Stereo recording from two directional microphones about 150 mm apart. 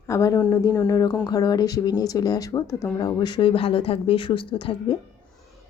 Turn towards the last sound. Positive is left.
turn(degrees=40)  # may be behind; listen again after turning